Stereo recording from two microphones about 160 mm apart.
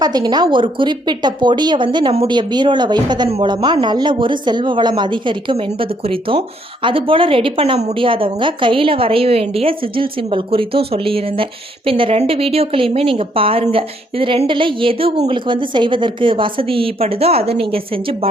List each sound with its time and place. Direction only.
0.0 s a woman's voice: 25° right (ahead or behind)